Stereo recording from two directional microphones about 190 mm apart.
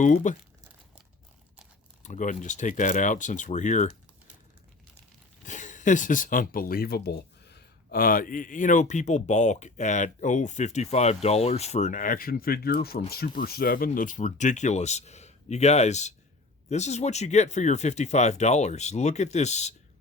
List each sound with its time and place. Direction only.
0.0 s speech: 40° left (ahead or behind)
2.0 s speech: 40° left (ahead or behind)
5.5 s speech: 40° left (ahead or behind)